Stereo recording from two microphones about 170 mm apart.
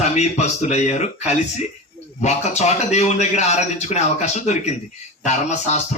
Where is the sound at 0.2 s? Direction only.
40° left (ahead or behind).